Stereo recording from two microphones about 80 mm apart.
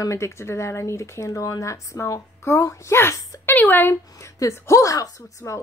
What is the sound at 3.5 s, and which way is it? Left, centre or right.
Speech, left.